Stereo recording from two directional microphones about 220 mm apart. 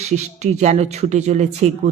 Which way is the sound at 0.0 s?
30° right (ahead or behind).